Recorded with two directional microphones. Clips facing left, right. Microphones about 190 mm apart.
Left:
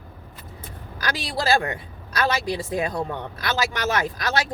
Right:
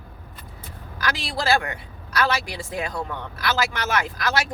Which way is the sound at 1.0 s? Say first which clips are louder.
Even; 25° left (ahead or behind).